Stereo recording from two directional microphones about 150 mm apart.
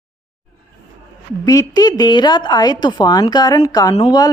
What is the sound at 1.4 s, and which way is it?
A woman's voice, 25° left (ahead or behind).